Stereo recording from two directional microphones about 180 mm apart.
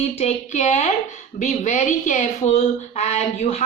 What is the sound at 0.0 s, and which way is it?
Speech, 40° left (ahead or behind).